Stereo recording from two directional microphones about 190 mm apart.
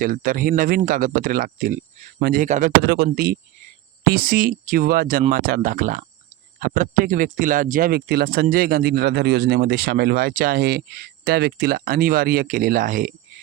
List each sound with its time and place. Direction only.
0.0 s speech: 45° right (ahead or behind)